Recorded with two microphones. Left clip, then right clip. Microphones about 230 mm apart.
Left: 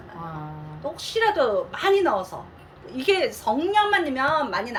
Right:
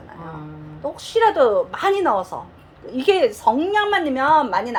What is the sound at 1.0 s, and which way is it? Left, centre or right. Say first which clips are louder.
A woman's voice: right 6 dB; centre.